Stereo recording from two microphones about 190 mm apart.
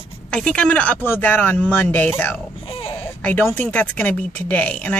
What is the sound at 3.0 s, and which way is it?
Speech, 10° left (ahead or behind).